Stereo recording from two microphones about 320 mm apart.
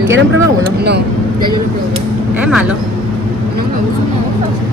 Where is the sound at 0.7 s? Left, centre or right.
Right.